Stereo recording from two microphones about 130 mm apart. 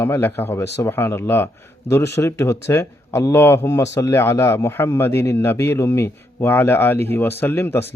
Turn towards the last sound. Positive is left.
turn(degrees=15)  # may be behind; listen again after turning